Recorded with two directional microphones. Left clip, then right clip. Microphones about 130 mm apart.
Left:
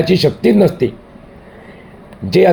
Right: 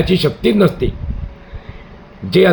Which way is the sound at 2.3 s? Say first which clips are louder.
Left 1 dB; 30° left (ahead or behind).